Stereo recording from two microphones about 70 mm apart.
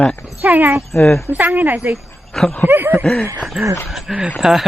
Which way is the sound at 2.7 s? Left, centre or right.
Right.